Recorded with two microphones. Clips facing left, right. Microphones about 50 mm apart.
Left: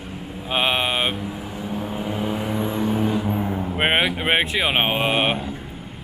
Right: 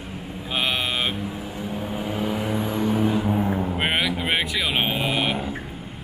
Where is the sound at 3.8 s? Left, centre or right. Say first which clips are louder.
Left 3 dB; left.